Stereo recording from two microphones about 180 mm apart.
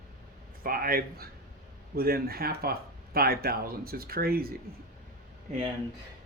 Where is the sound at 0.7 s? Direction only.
55° right (ahead or behind).